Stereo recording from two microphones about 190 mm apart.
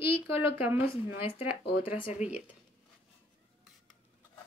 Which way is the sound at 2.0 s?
30° left (ahead or behind).